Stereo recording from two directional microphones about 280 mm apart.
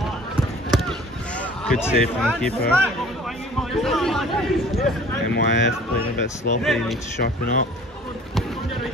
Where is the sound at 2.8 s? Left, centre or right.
Centre.